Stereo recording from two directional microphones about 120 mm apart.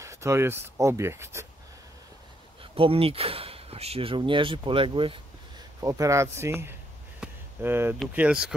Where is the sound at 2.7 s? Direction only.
50° right (ahead or behind).